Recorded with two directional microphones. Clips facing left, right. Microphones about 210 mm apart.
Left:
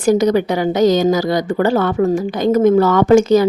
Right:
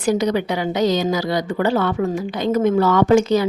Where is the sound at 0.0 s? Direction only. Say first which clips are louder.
Left 5 dB; 45° left (ahead or behind).